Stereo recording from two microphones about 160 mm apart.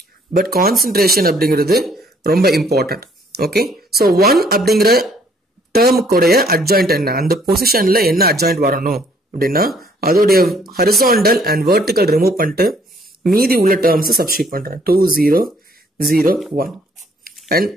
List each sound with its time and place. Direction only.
0.3 s speech: 70° right (ahead or behind)